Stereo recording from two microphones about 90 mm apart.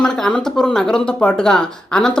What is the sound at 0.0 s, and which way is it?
Speech, 5° left (ahead or behind).